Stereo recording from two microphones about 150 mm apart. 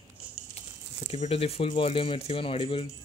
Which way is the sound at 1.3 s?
40° left (ahead or behind).